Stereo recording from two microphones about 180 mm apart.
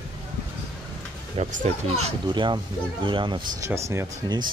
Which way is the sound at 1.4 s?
35° right (ahead or behind).